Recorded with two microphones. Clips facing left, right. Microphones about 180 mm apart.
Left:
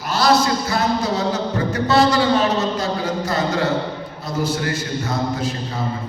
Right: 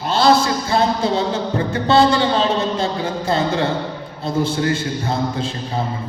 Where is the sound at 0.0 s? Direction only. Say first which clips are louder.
Right 2 dB; 25° right (ahead or behind).